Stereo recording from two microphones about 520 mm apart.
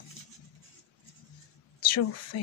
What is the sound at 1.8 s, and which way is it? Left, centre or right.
Speech, left.